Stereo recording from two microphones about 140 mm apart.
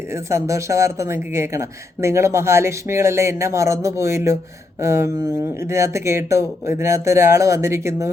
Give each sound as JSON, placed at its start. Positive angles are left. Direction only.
{"t": 0.1, "sound": "speech", "side_deg": -20}